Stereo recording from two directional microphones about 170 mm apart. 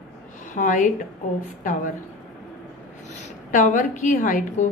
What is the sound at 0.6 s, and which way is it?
Speech, 50° left (ahead or behind).